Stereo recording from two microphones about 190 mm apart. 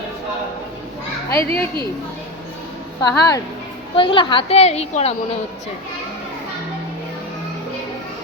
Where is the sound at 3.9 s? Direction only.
25° left (ahead or behind).